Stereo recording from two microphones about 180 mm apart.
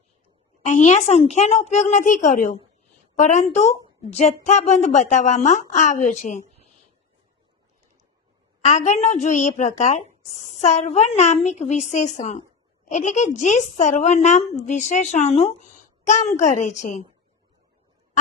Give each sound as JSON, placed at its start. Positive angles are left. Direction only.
{"t": 0.6, "sound": "a woman's voice", "side_deg": 40}
{"t": 8.6, "sound": "a woman's voice", "side_deg": 40}